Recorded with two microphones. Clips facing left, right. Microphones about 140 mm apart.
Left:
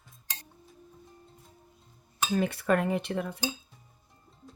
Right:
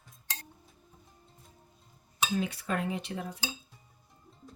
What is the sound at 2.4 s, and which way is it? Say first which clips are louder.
Speech: left 10 dB; 55° left (ahead or behind).